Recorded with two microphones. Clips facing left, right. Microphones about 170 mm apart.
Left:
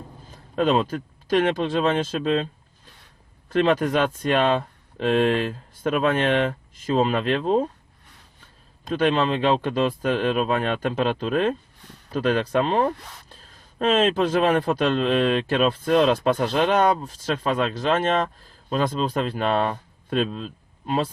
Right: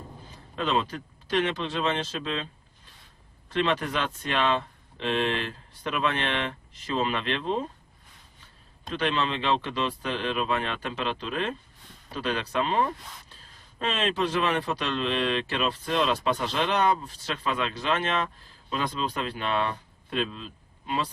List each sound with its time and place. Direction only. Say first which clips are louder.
0.5 s speech: left 7 dB; 50° left (ahead or behind)
3.5 s speech: left 7 dB; 45° left (ahead or behind)
8.9 s speech: left 7 dB; 50° left (ahead or behind)